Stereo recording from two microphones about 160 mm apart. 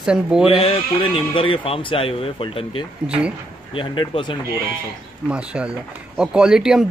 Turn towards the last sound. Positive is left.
turn(degrees=-5)  # may be behind; listen again after turning